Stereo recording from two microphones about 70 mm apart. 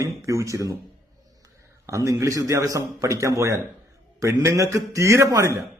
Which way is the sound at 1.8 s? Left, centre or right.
Right.